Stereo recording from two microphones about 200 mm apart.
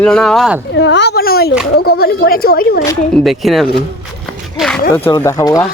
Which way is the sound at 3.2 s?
Centre (ahead or behind).